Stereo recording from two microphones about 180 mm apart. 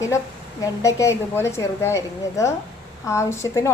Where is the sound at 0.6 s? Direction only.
15° left (ahead or behind).